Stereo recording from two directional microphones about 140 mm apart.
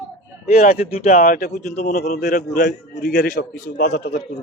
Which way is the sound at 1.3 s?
90° left.